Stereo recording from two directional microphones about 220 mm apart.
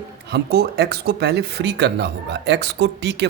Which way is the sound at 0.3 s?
45° right (ahead or behind).